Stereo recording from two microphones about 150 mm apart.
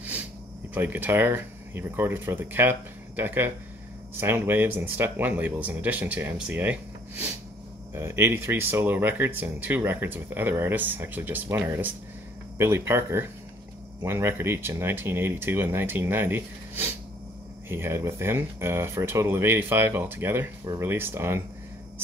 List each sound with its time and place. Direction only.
0.7 s speech: 15° right (ahead or behind)